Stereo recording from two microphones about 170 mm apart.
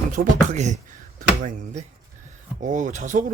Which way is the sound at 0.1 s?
50° right (ahead or behind).